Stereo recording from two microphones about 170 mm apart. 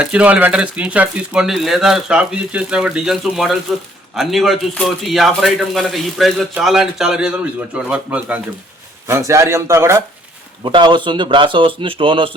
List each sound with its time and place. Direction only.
0.0 s speech: 5° right (ahead or behind)
10.6 s speech: 25° right (ahead or behind)